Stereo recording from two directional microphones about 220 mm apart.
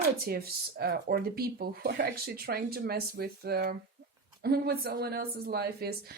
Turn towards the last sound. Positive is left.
turn(degrees=-45)  # may be behind; listen again after turning